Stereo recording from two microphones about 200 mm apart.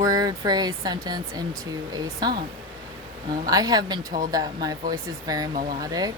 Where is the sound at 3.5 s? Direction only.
20° right (ahead or behind).